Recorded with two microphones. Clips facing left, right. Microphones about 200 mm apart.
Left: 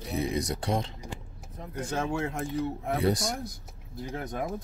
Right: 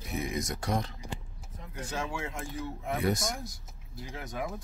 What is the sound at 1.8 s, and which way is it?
Speech, 55° left (ahead or behind).